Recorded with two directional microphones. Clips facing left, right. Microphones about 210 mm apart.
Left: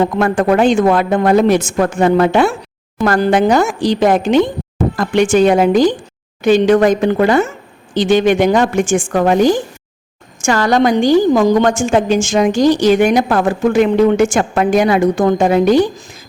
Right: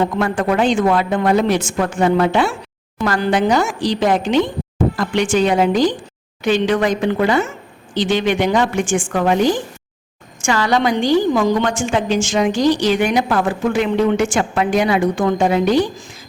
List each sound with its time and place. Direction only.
0.2 s a woman's voice: 45° left (ahead or behind)